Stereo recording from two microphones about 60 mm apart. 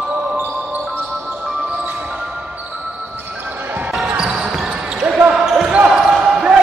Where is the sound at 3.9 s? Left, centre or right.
Centre.